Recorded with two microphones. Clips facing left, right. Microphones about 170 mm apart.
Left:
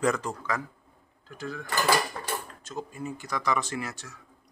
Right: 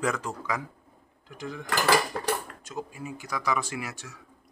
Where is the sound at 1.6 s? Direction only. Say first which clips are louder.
Right 1 dB; 90° right.